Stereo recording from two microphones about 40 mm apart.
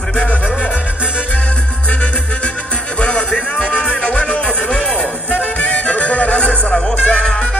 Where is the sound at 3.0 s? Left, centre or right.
Left.